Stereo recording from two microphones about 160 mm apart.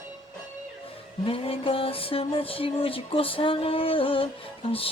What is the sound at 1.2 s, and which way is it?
Speech, 35° left (ahead or behind).